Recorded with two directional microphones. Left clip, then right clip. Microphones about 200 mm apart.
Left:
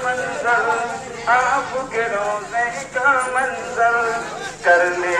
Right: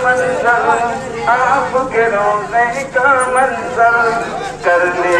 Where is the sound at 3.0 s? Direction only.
25° left (ahead or behind).